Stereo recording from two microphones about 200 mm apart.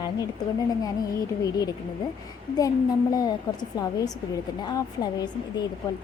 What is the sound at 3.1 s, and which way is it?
Speech, 20° left (ahead or behind).